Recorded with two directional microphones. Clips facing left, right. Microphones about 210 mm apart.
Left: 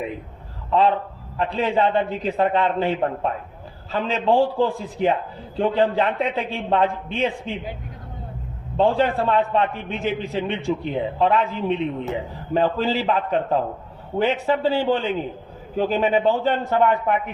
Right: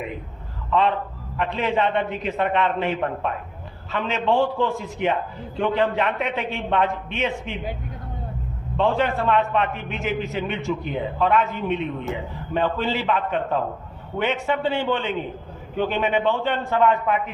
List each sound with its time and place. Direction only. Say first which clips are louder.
0.7 s a man's voice: left 2 dB; 35° left (ahead or behind)
8.8 s a man's voice: left 2 dB; 35° left (ahead or behind)